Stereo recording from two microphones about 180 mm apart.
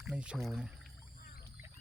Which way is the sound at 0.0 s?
5° right (ahead or behind).